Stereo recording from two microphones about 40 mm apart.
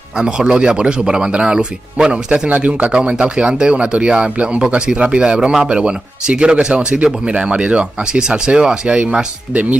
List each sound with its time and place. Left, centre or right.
0.2 s speech: right
9.5 s speech: right